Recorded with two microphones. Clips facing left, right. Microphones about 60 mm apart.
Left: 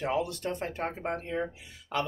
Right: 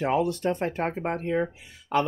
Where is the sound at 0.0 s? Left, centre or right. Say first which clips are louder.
Right 6 dB; right.